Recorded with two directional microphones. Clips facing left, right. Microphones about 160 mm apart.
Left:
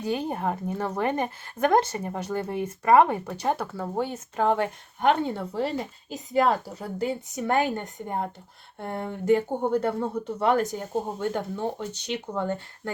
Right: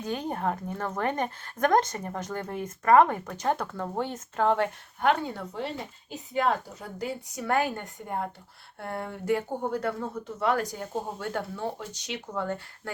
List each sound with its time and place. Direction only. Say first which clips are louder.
0.0 s speech: left 2 dB; 10° left (ahead or behind)